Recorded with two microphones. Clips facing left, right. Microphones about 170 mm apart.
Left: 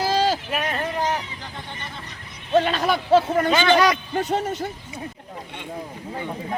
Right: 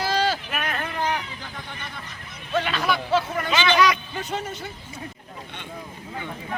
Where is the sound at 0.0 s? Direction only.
35° left (ahead or behind).